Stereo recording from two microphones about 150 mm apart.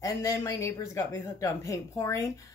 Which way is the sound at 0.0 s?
25° left (ahead or behind).